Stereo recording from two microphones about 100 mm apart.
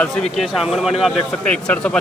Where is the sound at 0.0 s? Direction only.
5° left (ahead or behind).